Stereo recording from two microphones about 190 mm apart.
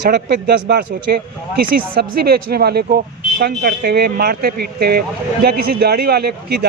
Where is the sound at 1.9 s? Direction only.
55° right (ahead or behind).